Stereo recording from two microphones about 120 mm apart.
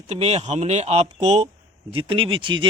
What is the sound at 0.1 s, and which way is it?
Speech, 60° right (ahead or behind).